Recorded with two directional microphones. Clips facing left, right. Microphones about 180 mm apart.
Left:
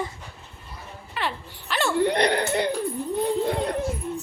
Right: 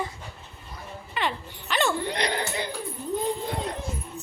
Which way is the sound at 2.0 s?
60° left (ahead or behind).